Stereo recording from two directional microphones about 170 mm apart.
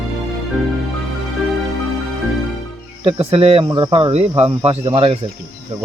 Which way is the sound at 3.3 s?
35° right (ahead or behind).